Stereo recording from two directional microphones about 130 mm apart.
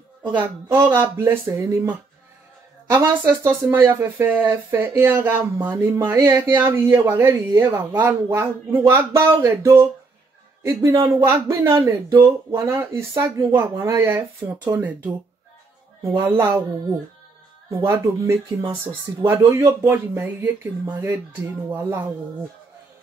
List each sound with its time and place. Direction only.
0.4 s a man's voice: 15° right (ahead or behind)
17.6 s speech: 25° right (ahead or behind)